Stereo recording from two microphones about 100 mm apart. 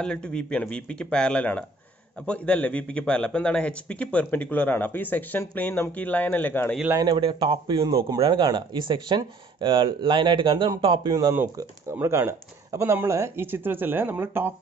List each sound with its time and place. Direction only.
0.0 s a man's voice: 10° left (ahead or behind)
7.1 s speech: 65° right (ahead or behind)
11.1 s speech: 35° right (ahead or behind)